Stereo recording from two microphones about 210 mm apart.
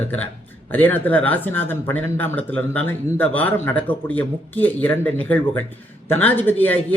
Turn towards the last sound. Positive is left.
turn(degrees=10)  # may be behind; listen again after turning